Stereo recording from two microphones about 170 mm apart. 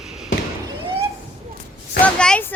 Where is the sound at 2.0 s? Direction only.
5° left (ahead or behind).